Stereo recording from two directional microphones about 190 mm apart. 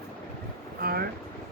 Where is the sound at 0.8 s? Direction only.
55° right (ahead or behind).